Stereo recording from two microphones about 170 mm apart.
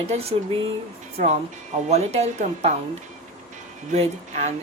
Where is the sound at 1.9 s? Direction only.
40° right (ahead or behind).